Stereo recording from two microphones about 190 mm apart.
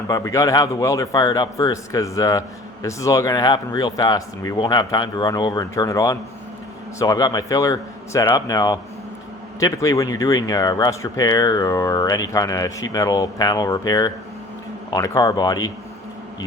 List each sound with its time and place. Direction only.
0.1 s a man's voice: 15° left (ahead or behind)